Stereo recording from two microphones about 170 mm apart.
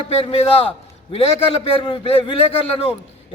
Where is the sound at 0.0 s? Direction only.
35° left (ahead or behind).